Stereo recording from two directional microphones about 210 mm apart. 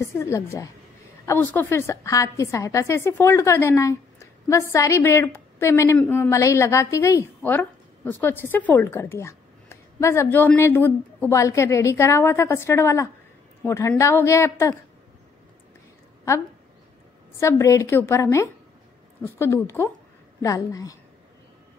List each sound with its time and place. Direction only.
0.0 s a woman's voice: 15° left (ahead or behind)
17.4 s a woman's voice: 15° left (ahead or behind)